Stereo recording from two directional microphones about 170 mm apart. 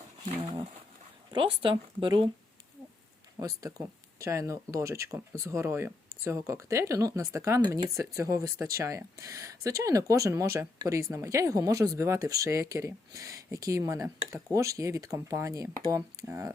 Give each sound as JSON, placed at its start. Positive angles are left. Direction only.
{"t": 0.3, "sound": "a sound", "side_deg": -35}
{"t": 1.6, "sound": "speech", "side_deg": -25}
{"t": 3.3, "sound": "speech", "side_deg": -20}